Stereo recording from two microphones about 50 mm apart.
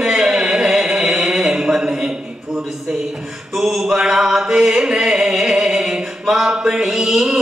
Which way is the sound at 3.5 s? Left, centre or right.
Centre.